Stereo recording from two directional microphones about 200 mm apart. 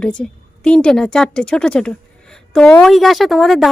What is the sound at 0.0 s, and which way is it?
Speech, 5° left (ahead or behind).